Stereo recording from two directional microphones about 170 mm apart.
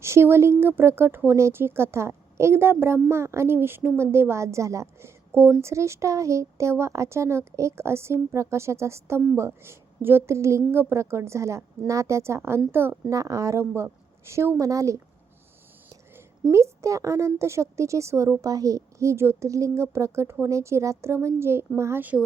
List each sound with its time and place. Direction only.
0.0 s a woman's voice: 15° right (ahead or behind)
16.1 s a woman's voice: 15° right (ahead or behind)